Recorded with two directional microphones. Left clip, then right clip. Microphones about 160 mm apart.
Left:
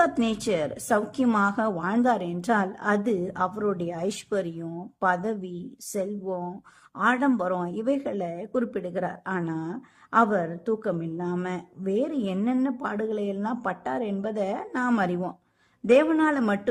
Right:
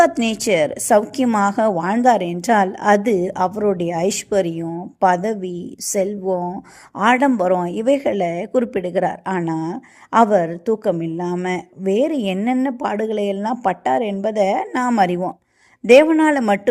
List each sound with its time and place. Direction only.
0.0 s a woman's voice: 15° right (ahead or behind)